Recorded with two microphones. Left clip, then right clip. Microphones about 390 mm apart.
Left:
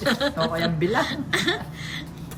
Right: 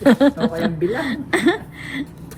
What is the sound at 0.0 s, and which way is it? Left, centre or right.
A woman's voice, centre.